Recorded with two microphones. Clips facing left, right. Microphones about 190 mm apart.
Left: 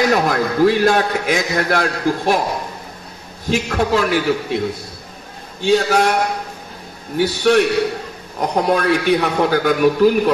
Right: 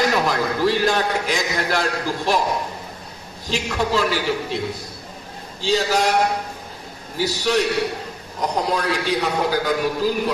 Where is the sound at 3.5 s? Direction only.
55° left (ahead or behind).